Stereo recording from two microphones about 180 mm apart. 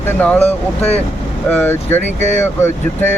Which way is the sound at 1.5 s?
10° left (ahead or behind).